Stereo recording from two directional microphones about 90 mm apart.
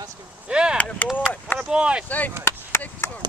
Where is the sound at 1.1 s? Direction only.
20° left (ahead or behind).